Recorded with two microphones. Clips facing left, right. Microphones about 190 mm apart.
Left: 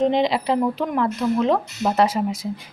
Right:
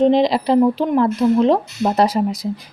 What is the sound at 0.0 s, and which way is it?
Speech, 35° right (ahead or behind).